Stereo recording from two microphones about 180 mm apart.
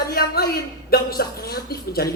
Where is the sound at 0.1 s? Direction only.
60° left (ahead or behind).